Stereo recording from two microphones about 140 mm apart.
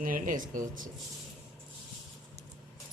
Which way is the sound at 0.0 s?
75° right (ahead or behind).